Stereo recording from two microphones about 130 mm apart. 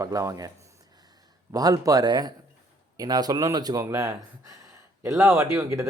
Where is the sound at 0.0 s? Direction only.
25° right (ahead or behind).